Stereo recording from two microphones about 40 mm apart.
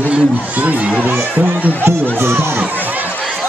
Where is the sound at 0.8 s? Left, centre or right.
Right.